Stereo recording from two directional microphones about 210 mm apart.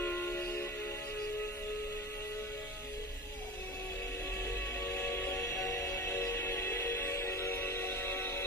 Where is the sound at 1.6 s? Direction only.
50° left (ahead or behind).